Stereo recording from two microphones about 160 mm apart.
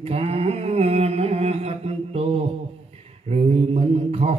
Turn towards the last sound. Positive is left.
turn(degrees=-40)  # may be behind; listen again after turning